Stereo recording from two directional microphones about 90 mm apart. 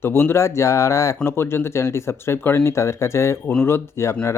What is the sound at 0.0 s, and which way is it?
Speech, 25° left (ahead or behind).